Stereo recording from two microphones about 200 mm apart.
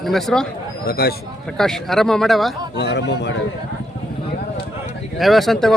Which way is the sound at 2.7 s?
55° left (ahead or behind).